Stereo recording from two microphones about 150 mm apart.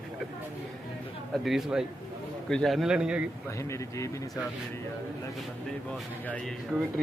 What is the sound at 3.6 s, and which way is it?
Speech, 20° left (ahead or behind).